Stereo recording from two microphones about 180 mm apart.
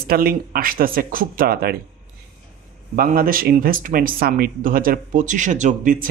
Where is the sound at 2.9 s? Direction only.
50° right (ahead or behind).